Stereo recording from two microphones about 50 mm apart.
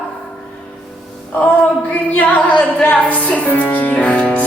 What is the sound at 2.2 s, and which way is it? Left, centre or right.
Speech, left.